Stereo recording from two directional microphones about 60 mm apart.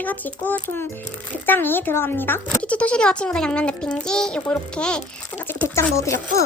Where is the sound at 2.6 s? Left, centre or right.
Left.